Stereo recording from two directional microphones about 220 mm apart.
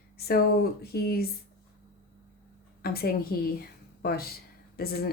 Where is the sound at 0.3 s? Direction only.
45° left (ahead or behind).